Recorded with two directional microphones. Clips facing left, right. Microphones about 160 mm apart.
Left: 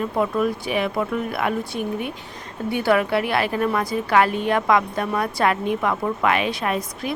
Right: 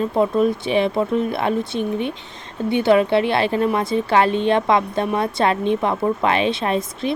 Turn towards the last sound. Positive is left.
turn(degrees=-25)  # may be behind; listen again after turning